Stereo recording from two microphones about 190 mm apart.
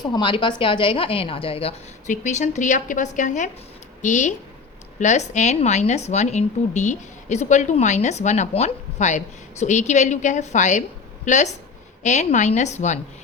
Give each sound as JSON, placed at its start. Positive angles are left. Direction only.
{"t": 0.0, "sound": "a woman's voice", "side_deg": 25}